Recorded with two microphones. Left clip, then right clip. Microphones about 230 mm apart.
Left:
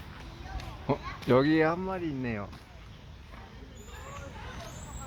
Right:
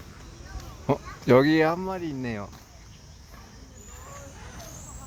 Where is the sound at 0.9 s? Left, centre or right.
Right.